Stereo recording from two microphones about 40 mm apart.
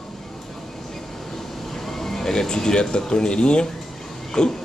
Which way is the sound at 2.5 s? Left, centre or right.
Centre.